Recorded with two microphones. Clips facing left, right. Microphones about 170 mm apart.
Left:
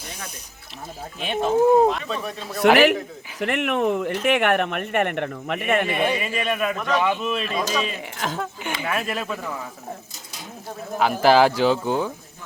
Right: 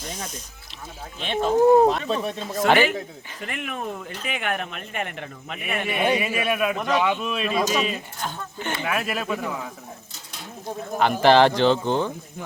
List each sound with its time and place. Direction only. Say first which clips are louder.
1.2 s a man's voice: even; 5° left (ahead or behind)
1.9 s speech: right 2 dB; 35° right (ahead or behind)
2.7 s speech: left 4 dB; 75° left (ahead or behind)
6.1 s a man's voice: right 1 dB; 5° right (ahead or behind)
8.2 s speech: left 8 dB; 90° left
8.8 s a man's voice: left 1 dB; centre (ahead or behind)
10.9 s speech: even; 5° left (ahead or behind)